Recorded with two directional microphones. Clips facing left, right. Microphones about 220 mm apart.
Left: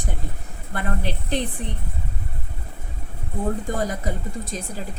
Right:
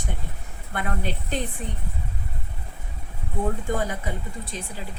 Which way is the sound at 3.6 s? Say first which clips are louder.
Left 2 dB; 35° left (ahead or behind).